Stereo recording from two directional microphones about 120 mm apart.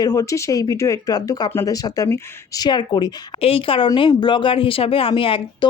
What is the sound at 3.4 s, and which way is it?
A woman's voice, 50° left (ahead or behind).